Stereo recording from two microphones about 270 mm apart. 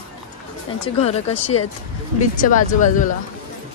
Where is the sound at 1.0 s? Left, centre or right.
Left.